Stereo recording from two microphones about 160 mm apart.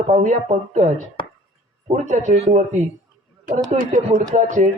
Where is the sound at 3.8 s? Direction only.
60° right (ahead or behind).